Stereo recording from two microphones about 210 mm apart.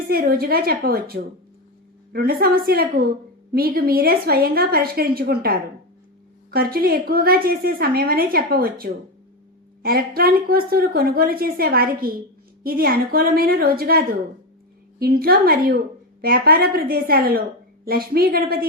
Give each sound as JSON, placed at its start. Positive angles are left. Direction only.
{"t": 0.1, "sound": "a woman's voice", "side_deg": -45}